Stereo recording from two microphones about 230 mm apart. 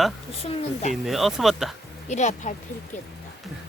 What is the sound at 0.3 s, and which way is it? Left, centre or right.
Speech, left.